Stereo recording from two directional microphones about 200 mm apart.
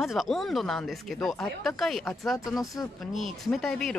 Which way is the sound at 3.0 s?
Centre (ahead or behind).